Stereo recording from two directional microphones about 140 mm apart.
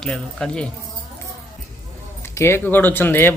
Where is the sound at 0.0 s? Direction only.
5° left (ahead or behind).